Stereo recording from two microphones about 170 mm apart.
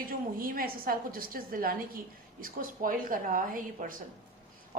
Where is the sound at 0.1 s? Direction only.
55° right (ahead or behind).